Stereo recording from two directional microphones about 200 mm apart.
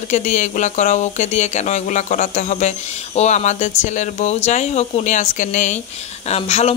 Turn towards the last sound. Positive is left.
turn(degrees=30)  # may be behind; listen again after turning